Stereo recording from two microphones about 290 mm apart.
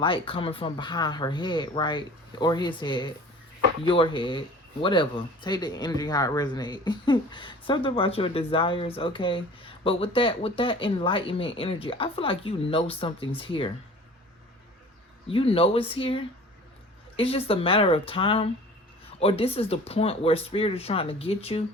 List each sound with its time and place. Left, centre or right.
0.0 s speech: centre
15.3 s speech: centre